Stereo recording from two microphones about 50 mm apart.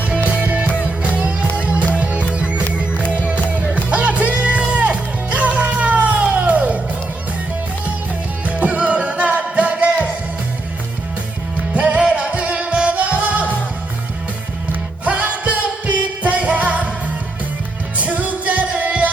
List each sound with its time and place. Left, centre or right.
0.3 s music: right
3.8 s music: right
8.4 s music: right
11.7 s music: right
15.1 s music: right
17.9 s music: right